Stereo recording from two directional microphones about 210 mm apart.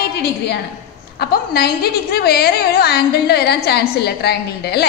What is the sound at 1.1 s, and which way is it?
A woman's voice, 45° left (ahead or behind).